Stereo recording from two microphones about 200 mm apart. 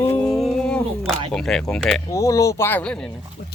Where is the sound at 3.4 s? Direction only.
55° left (ahead or behind).